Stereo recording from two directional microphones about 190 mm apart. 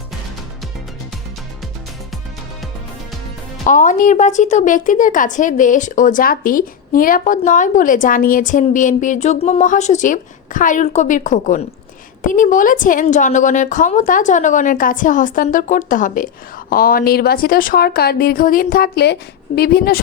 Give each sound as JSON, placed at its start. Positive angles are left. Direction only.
{"t": 3.7, "sound": "a woman's voice", "side_deg": 45}